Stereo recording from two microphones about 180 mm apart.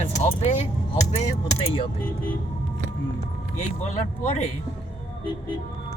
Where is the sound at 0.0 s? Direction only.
40° left (ahead or behind).